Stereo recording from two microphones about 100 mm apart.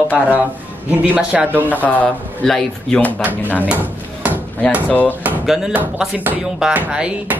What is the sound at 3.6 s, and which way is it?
Drawer open or close, 15° right (ahead or behind).